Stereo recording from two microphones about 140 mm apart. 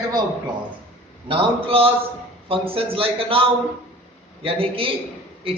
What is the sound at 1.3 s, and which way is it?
A man's voice, 40° right (ahead or behind).